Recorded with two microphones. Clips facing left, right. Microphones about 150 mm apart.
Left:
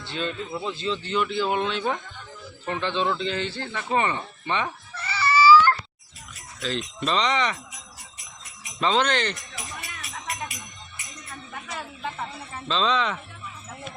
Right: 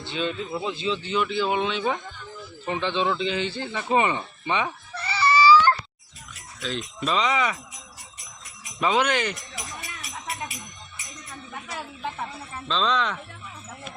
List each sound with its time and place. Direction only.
0.1 s speech: 10° right (ahead or behind)
5.0 s a sound: 15° right (ahead or behind)
6.6 s speech: centre (ahead or behind)
8.8 s speech: 10° right (ahead or behind)
11.7 s a sound: 10° right (ahead or behind)
12.6 s speech: centre (ahead or behind)